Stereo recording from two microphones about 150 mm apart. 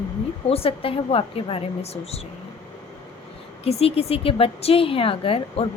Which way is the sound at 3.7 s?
40° left (ahead or behind).